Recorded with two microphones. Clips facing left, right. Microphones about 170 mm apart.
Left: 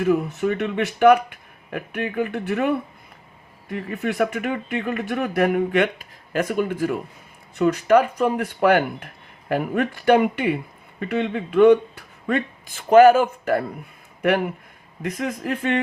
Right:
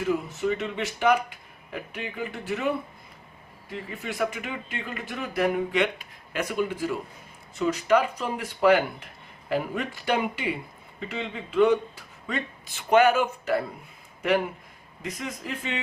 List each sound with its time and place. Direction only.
0.0 s speech: 60° left (ahead or behind)